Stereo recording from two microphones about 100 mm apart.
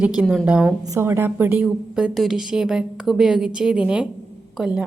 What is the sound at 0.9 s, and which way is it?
Speech, 25° right (ahead or behind).